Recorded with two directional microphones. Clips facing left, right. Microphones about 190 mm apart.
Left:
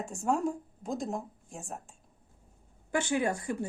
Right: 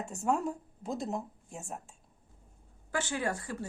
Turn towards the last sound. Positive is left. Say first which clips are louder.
# left 4 dB
turn(degrees=15)  # may be behind; listen again after turning